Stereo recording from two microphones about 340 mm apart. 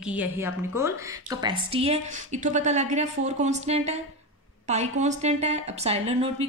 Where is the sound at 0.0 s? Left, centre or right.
Centre.